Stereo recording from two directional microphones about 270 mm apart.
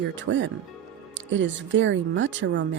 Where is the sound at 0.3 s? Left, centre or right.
Right.